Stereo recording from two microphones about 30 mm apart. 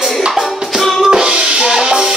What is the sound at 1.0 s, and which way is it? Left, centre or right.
Music, right.